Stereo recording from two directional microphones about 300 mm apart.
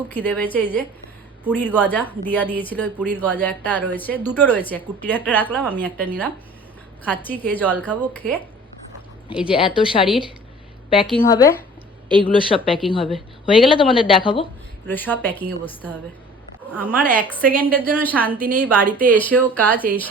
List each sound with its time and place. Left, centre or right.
0.1 s a woman's voice: centre
9.5 s a woman's voice: centre
14.8 s a woman's voice: centre
16.7 s a woman's voice: centre